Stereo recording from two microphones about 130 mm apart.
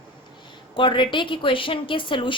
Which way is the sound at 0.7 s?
40° left (ahead or behind).